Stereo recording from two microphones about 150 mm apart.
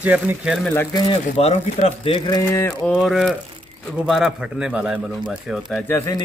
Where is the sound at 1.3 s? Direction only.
45° left (ahead or behind).